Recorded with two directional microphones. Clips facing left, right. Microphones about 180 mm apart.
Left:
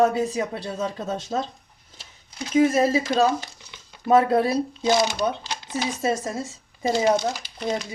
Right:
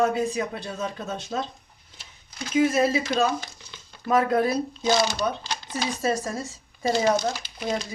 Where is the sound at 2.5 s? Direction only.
40° left (ahead or behind).